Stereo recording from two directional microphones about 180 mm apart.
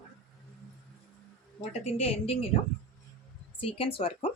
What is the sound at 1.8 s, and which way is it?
Speech, 35° left (ahead or behind).